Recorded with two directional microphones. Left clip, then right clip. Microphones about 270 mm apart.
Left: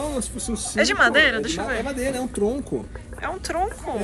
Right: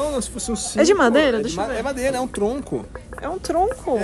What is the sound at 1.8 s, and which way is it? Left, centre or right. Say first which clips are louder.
Speech: right 4 dB; centre.